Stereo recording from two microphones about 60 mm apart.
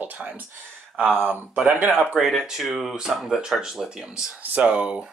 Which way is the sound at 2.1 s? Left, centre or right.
Centre.